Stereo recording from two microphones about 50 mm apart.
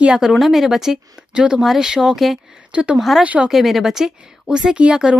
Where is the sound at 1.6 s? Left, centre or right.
Centre.